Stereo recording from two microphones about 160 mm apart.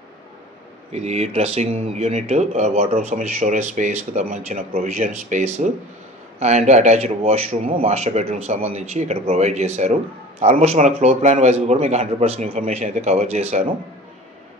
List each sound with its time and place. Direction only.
0.9 s speech: 40° right (ahead or behind)